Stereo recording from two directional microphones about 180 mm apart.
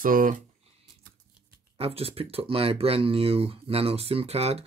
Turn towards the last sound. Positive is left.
turn(degrees=-35)  # may be behind; listen again after turning